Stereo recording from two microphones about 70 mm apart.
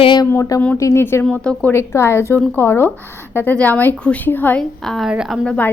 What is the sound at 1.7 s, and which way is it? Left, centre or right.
A woman's voice, left.